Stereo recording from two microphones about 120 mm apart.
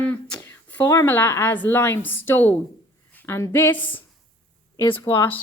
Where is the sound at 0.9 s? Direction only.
20° left (ahead or behind).